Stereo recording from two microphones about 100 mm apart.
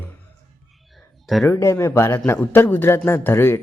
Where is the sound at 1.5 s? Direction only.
25° left (ahead or behind).